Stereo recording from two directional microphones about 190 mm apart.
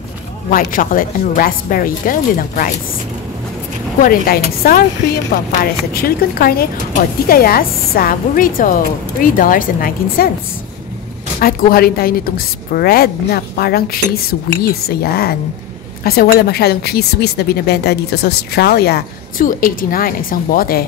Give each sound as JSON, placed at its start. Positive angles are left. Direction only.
{"t": 0.5, "sound": "a woman's voice", "side_deg": 45}
{"t": 4.0, "sound": "a woman's voice", "side_deg": 50}
{"t": 5.9, "sound": "a woman's voice", "side_deg": 50}
{"t": 11.3, "sound": "a woman's voice", "side_deg": 50}